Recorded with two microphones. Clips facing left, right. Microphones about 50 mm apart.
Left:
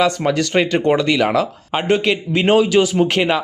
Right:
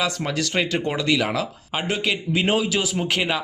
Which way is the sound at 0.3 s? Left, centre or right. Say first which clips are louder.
Left 7 dB; centre.